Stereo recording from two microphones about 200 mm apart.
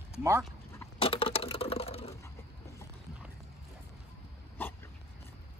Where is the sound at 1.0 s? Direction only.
25° left (ahead or behind).